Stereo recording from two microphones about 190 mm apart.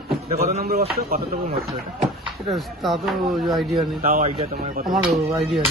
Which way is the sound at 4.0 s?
45° right (ahead or behind).